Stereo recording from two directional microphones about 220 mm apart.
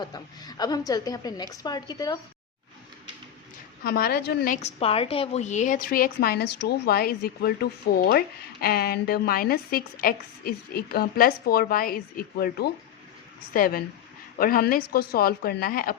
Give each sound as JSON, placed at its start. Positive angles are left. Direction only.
{"t": 0.0, "sound": "a woman's voice", "side_deg": 20}
{"t": 3.8, "sound": "a woman's voice", "side_deg": 45}